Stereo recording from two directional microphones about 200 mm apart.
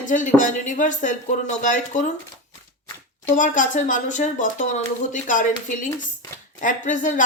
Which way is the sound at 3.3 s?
40° left (ahead or behind).